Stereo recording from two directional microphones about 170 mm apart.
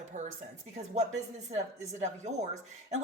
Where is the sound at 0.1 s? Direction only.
45° right (ahead or behind).